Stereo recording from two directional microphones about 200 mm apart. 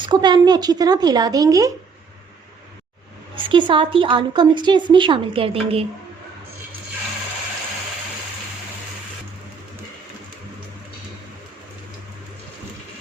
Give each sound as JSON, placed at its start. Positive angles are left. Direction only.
{"t": 0.0, "sound": "a woman's voice", "side_deg": -20}
{"t": 3.3, "sound": "a woman's voice", "side_deg": -25}